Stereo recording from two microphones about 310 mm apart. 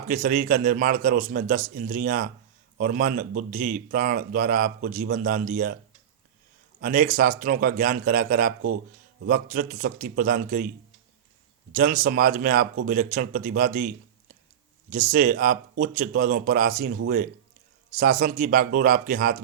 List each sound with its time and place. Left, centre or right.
0.1 s a man's voice: right
6.8 s a man's voice: right
11.7 s a man's voice: right